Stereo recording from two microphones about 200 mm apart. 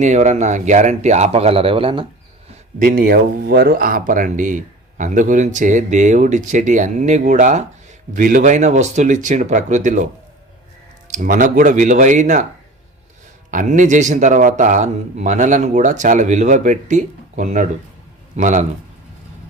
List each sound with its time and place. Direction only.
0.0 s speech: 35° right (ahead or behind)
2.7 s speech: 45° right (ahead or behind)
11.1 s speech: 40° right (ahead or behind)
13.5 s speech: 40° right (ahead or behind)